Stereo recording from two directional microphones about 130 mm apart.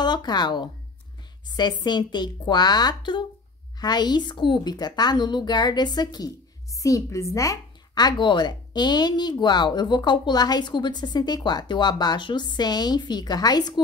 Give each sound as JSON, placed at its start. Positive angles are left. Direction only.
{"t": 0.0, "sound": "a woman's voice", "side_deg": 35}